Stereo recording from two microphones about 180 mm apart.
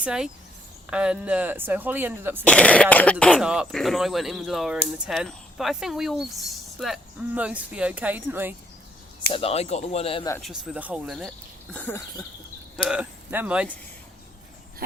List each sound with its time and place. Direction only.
0.0 s speech: 5° right (ahead or behind)
2.4 s speech: 5° left (ahead or behind)
3.4 s speech: 5° right (ahead or behind)
9.3 s speech: 35° left (ahead or behind)
10.4 s speech: centre (ahead or behind)
11.7 s speech: 10° left (ahead or behind)
12.9 s speech: 10° right (ahead or behind)